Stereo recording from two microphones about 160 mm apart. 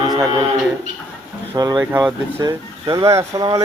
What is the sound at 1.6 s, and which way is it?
Speech, 25° right (ahead or behind).